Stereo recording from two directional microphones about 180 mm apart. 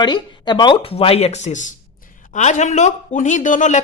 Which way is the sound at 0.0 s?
25° left (ahead or behind).